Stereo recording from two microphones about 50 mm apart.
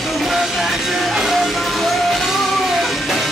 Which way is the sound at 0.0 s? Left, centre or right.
Centre.